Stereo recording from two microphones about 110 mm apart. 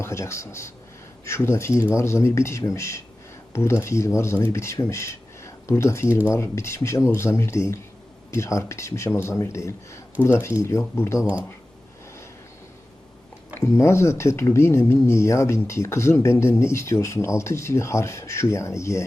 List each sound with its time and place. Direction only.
0.0 s speech: 25° left (ahead or behind)
13.7 s speech: 25° left (ahead or behind)